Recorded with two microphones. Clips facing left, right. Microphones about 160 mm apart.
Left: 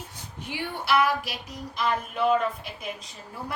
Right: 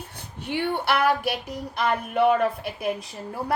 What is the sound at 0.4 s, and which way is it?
A woman's voice, 60° right (ahead or behind).